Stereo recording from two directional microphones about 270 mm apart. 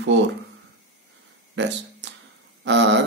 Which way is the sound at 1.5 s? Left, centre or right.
Right.